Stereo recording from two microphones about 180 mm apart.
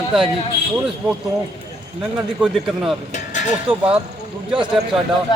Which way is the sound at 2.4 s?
5° right (ahead or behind).